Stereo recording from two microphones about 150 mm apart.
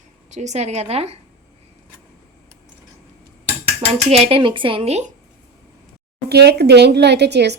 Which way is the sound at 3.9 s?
40° right (ahead or behind).